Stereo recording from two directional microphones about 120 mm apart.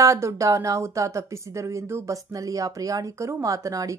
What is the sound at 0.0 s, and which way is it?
Speech, 25° right (ahead or behind).